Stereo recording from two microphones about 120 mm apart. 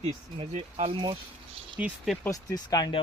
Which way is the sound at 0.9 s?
45° right (ahead or behind).